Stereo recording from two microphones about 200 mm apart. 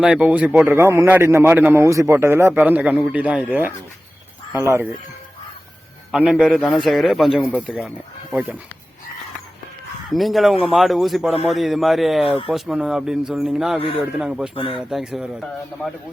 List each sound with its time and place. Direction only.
0.0 s a man's voice: 5° right (ahead or behind)
6.1 s speech: 5° right (ahead or behind)
10.1 s speech: centre (ahead or behind)
13.7 s speech: 25° left (ahead or behind)
14.2 s speech: 5° right (ahead or behind)
14.5 s speech: 25° left (ahead or behind)
14.8 s speech: centre (ahead or behind)